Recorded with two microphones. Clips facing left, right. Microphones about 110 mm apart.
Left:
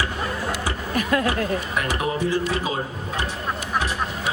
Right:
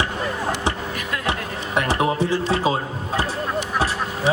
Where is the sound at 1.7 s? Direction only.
30° right (ahead or behind).